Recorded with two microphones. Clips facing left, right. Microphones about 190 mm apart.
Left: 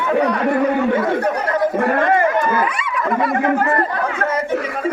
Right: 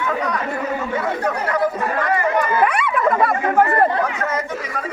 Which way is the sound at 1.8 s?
55° left (ahead or behind).